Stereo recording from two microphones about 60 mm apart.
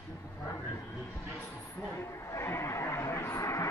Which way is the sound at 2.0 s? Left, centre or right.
Left.